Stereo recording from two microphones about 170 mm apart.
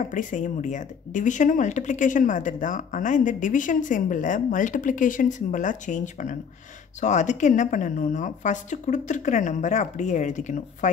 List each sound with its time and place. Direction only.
0.0 s speech: 50° left (ahead or behind)